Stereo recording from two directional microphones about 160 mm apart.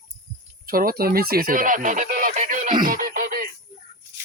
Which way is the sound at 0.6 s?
65° right (ahead or behind).